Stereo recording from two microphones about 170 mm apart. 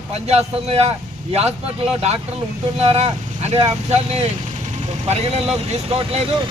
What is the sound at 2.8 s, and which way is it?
Speech, 35° right (ahead or behind).